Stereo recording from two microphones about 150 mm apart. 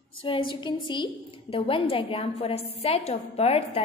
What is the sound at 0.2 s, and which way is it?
A woman's voice, 35° left (ahead or behind).